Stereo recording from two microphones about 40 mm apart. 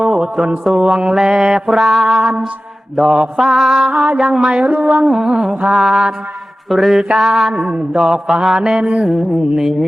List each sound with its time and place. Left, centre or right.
0.0 s a sound: centre
0.9 s music: centre
2.9 s mantra: centre
3.8 s music: right
4.2 s mantra: centre
4.6 s music: right
5.1 s mantra: centre
6.7 s music: centre
7.2 s mantra: centre
7.9 s music: centre
8.8 s mantra: right
9.0 s music: centre
9.6 s mantra: centre